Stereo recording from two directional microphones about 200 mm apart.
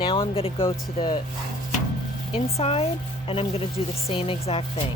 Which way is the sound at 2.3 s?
30° left (ahead or behind).